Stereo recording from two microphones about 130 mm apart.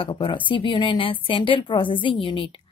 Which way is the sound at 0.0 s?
40° left (ahead or behind).